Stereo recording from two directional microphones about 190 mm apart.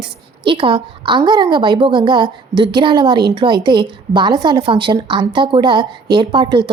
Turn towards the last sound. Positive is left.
turn(degrees=-25)  # may be behind; listen again after turning